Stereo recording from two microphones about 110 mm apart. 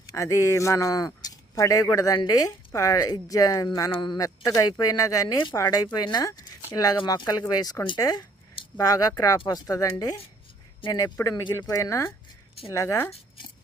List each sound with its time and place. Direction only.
0.1 s speech: 30° left (ahead or behind)
4.0 s speech: 40° left (ahead or behind)
4.4 s speech: 30° left (ahead or behind)